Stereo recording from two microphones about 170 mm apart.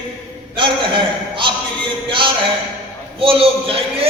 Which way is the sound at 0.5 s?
30° right (ahead or behind).